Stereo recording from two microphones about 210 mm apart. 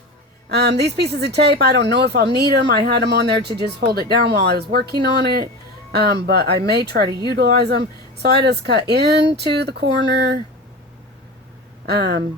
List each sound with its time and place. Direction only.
0.4 s speech: 50° right (ahead or behind)
11.9 s speech: 50° right (ahead or behind)